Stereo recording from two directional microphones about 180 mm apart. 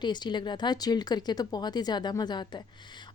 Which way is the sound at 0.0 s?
25° left (ahead or behind).